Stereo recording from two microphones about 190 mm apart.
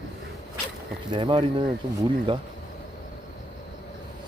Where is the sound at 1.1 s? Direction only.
25° right (ahead or behind).